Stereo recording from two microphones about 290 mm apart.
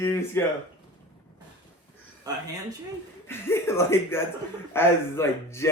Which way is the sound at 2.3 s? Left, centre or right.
Centre.